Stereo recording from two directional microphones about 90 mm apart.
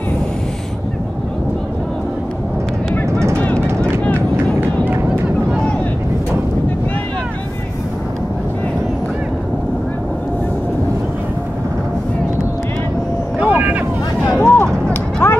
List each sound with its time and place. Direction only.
3.4 s vehicle: 10° left (ahead or behind)
13.4 s boat: 15° right (ahead or behind)
14.4 s a sound: 25° left (ahead or behind)